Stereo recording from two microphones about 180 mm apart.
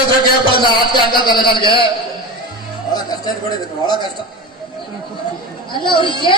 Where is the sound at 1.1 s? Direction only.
25° left (ahead or behind).